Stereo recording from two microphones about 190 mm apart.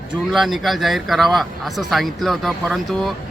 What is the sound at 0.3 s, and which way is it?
Speech, centre (ahead or behind).